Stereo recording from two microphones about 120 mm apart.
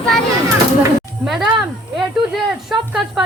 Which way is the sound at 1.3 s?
Centre (ahead or behind).